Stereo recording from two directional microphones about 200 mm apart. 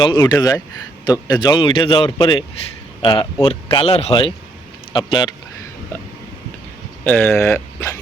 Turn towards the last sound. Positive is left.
turn(degrees=15)  # may be behind; listen again after turning